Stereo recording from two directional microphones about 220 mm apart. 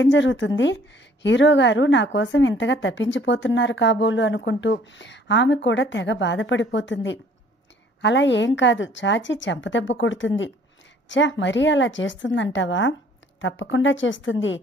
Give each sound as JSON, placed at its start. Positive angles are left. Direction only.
{"t": 0.0, "sound": "a woman's voice", "side_deg": 55}